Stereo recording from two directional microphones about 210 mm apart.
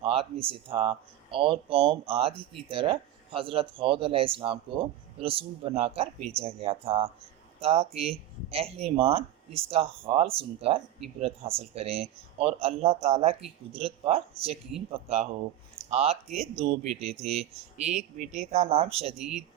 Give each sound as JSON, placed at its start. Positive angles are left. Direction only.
{"t": 0.0, "sound": "speech", "side_deg": -25}